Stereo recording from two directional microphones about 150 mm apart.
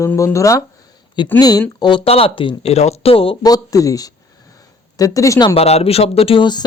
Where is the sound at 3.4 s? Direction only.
25° left (ahead or behind).